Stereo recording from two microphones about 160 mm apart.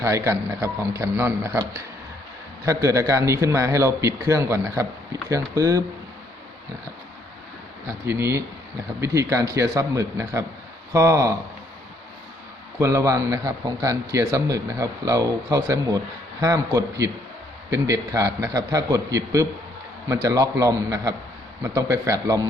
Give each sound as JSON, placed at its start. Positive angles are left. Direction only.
{"t": 0.0, "sound": "a man's voice", "side_deg": -15}
{"t": 8.0, "sound": "a man's voice", "side_deg": -15}
{"t": 12.8, "sound": "a man's voice", "side_deg": -20}